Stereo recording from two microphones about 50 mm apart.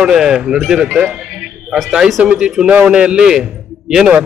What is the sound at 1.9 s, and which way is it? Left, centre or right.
Speech, centre.